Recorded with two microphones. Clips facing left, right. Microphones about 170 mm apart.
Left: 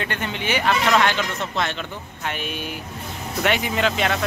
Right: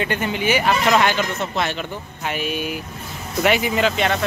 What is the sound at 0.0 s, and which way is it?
A man's voice, 10° right (ahead or behind).